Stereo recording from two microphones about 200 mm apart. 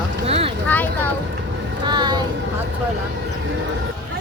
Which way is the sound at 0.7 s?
10° left (ahead or behind).